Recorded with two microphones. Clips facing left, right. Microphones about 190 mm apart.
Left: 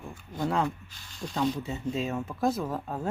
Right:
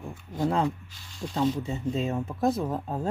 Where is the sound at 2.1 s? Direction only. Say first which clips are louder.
Right 2 dB; 15° right (ahead or behind).